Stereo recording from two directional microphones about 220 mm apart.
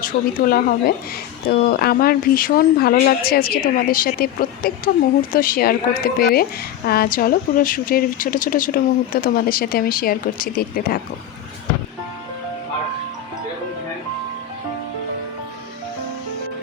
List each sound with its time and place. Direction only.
0.0 s speech: 40° left (ahead or behind)